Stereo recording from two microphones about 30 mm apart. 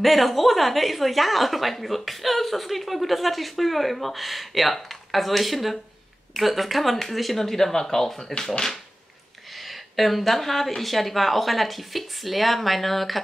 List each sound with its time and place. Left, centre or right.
0.0 s a woman's voice: centre
7.3 s speech: centre
9.6 s a woman's voice: centre